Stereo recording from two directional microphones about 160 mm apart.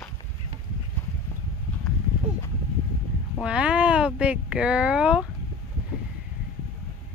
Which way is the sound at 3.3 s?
5° right (ahead or behind).